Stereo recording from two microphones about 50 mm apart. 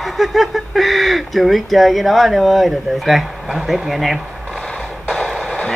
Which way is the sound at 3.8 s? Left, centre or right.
Centre.